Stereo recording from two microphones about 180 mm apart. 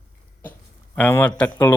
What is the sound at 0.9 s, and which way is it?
Speech, 10° left (ahead or behind).